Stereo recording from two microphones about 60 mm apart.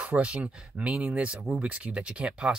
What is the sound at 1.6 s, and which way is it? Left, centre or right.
Speech, centre.